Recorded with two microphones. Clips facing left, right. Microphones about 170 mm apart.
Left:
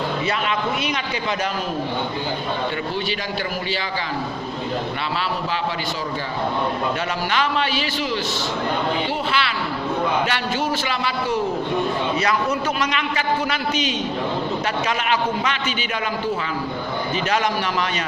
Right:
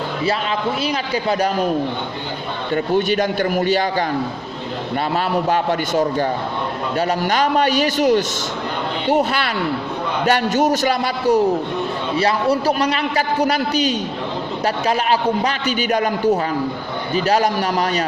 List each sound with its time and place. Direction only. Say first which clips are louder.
0.9 s a man's voice: right 5 dB; 35° right (ahead or behind)
2.7 s a man's voice: right 8 dB; 50° right (ahead or behind)
5.1 s a man's voice: right 9 dB; 50° right (ahead or behind)
7.3 s a man's voice: right 4 dB; 40° right (ahead or behind)